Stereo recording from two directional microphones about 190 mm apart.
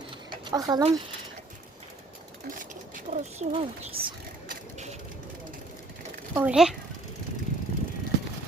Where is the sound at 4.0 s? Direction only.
55° right (ahead or behind).